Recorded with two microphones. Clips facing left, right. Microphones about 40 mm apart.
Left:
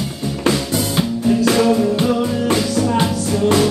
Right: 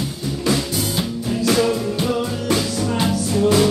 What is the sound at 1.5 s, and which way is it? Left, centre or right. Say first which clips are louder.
Music: left 4 dB; left.